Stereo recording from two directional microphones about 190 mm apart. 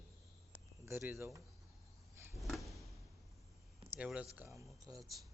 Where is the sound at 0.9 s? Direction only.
10° right (ahead or behind).